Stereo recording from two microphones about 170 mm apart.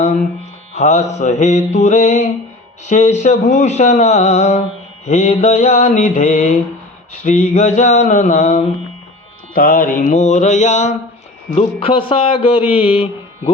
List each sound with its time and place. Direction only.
0.7 s speech: 45° left (ahead or behind)
11.5 s speech: 35° left (ahead or behind)